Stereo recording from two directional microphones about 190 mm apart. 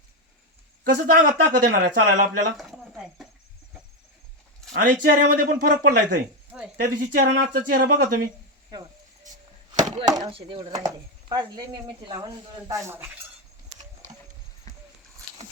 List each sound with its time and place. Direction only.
0.9 s speech: 45° right (ahead or behind)
2.6 s a sound: centre (ahead or behind)
4.7 s speech: 50° right (ahead or behind)
6.5 s speech: 5° right (ahead or behind)
6.8 s speech: 50° right (ahead or behind)
10.1 s speech: 25° right (ahead or behind)